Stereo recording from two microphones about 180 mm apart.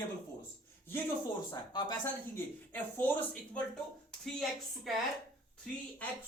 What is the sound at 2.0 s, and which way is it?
Speech, 10° left (ahead or behind).